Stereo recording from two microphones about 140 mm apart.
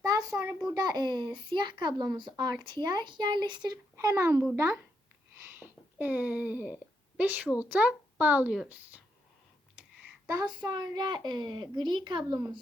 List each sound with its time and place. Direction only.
0.0 s a sound: 25° right (ahead or behind)
0.7 s a child's voice: 25° right (ahead or behind)
3.9 s speech: 20° right (ahead or behind)
10.2 s a child's voice: 30° right (ahead or behind)